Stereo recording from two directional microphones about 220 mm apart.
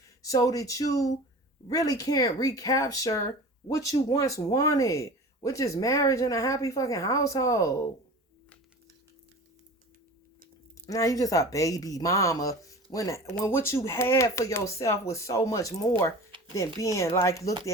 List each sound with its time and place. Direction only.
0.2 s speech: 15° left (ahead or behind)
10.8 s speech: 15° left (ahead or behind)